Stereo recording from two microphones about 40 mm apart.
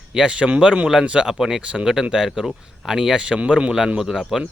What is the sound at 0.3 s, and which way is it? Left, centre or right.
Speech, right.